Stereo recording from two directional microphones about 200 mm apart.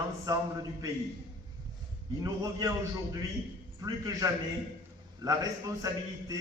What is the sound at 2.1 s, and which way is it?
A man's voice, 15° right (ahead or behind).